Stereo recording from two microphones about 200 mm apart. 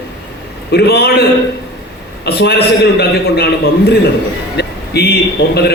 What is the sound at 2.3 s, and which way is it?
A man's voice, 55° left (ahead or behind).